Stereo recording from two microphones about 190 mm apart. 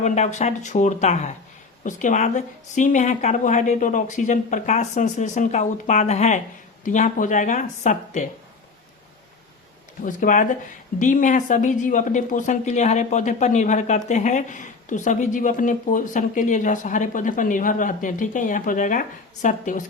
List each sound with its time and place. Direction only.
0.0 s a woman's voice: 35° left (ahead or behind)
10.0 s a woman's voice: 45° left (ahead or behind)